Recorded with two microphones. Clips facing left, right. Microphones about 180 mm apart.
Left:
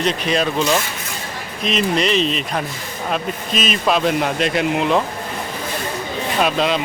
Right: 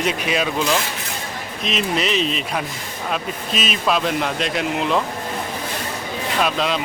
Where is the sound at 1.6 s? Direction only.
Centre (ahead or behind).